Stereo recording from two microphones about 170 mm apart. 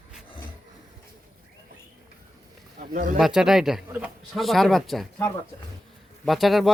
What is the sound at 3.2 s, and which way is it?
A man's voice, 5° right (ahead or behind).